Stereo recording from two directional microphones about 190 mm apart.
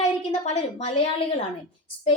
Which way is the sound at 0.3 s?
35° left (ahead or behind).